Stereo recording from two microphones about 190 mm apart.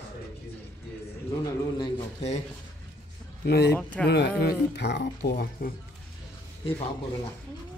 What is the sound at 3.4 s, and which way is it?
Speech, 60° left (ahead or behind).